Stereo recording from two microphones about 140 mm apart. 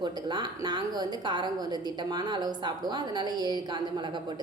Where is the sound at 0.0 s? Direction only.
30° right (ahead or behind).